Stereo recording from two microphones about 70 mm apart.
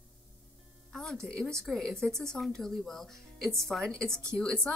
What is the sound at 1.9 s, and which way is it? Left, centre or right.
Speech, right.